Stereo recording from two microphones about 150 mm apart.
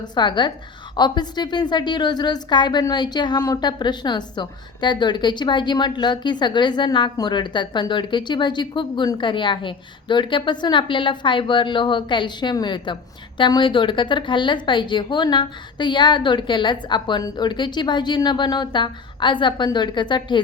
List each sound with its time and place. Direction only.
0.0 s a woman's voice: 30° left (ahead or behind)